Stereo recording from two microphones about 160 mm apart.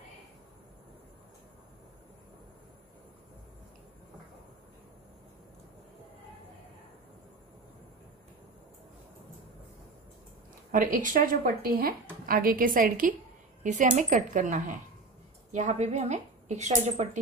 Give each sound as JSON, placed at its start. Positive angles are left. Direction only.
{"t": 10.7, "sound": "a woman's voice", "side_deg": -55}